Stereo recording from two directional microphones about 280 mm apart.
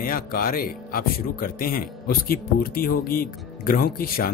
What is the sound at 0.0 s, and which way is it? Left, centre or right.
Speech, left.